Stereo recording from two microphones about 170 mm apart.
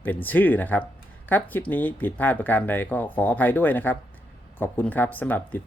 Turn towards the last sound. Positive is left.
turn(degrees=10)  # may be behind; listen again after turning